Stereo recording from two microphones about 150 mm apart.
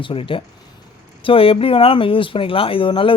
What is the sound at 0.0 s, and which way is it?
Speech, 35° left (ahead or behind).